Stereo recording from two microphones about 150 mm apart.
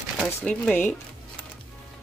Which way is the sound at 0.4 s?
10° left (ahead or behind).